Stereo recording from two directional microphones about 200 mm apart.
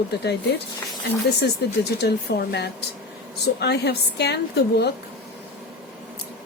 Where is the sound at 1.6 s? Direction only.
55° left (ahead or behind).